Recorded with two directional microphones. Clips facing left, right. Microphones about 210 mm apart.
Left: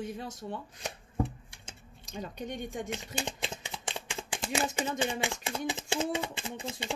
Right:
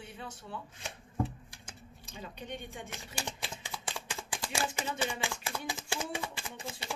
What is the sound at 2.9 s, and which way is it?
Speech, 20° left (ahead or behind).